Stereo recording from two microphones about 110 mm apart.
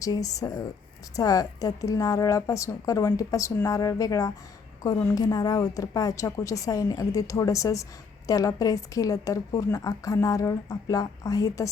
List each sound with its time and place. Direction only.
0.0 s a woman's voice: 30° left (ahead or behind)